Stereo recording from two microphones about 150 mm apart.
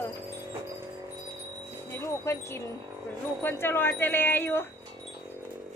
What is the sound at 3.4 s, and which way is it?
Speech, 15° left (ahead or behind).